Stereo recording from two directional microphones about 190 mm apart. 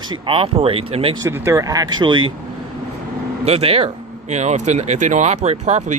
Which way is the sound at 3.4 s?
30° right (ahead or behind).